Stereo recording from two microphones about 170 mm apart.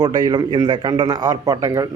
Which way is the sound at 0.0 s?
25° right (ahead or behind).